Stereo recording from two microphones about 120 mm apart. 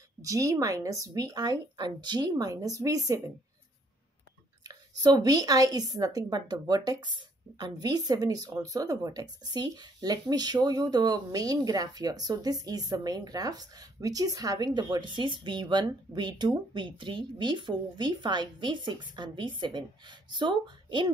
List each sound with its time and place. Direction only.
0.2 s a woman's voice: 30° right (ahead or behind)
4.6 s a woman's voice: 35° right (ahead or behind)